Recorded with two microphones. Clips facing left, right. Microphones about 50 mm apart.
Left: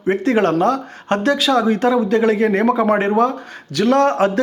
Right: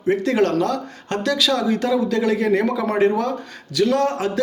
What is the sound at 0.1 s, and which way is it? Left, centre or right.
Speech, left.